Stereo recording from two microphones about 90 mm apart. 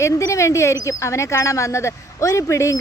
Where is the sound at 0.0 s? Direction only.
35° left (ahead or behind).